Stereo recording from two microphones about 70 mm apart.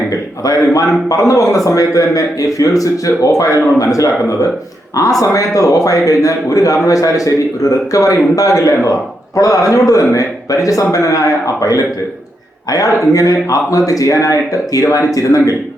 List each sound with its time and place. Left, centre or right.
0.4 s a man's voice: left